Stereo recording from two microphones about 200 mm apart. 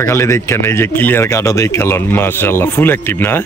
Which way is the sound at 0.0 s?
15° left (ahead or behind).